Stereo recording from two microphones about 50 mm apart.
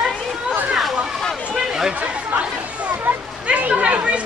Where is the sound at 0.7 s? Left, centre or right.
Centre.